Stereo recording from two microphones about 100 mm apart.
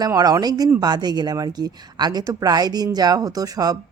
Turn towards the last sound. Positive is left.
turn(degrees=-40)  # may be behind; listen again after turning